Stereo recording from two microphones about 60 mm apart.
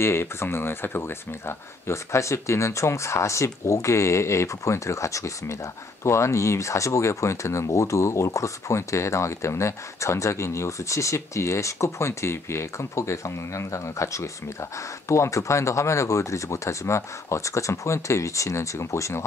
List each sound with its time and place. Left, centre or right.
0.0 s speech: left